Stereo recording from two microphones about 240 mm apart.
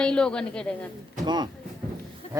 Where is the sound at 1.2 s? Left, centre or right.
Centre.